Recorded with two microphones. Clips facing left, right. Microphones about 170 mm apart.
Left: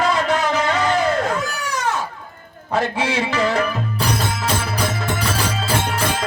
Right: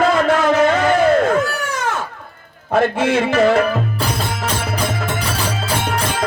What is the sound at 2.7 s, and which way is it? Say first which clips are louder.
Music: right 5 dB; 50° right (ahead or behind).